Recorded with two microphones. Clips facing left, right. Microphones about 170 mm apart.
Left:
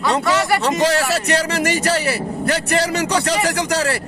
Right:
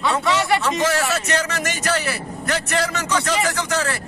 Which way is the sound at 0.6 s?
35° left (ahead or behind).